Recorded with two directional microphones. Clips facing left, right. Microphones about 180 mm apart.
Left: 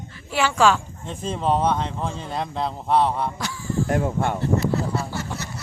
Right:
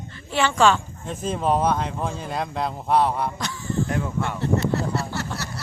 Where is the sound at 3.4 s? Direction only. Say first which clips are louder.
Even; 10° left (ahead or behind).